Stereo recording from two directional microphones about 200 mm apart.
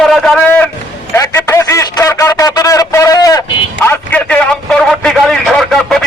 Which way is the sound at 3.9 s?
5° left (ahead or behind).